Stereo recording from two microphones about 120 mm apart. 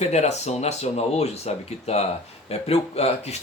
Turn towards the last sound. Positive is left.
turn(degrees=60)  # may be behind; listen again after turning